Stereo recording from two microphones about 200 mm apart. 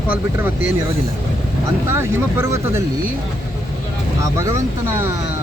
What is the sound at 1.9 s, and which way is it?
Speech, 10° right (ahead or behind).